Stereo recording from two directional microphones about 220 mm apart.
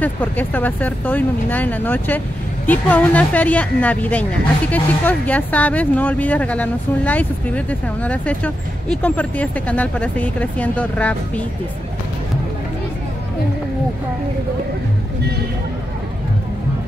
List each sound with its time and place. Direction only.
0.0 s speech: 5° left (ahead or behind)